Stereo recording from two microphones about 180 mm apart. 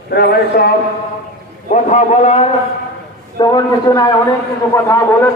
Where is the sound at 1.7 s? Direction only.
40° left (ahead or behind).